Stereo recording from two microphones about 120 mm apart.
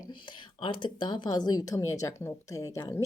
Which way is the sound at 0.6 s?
45° left (ahead or behind).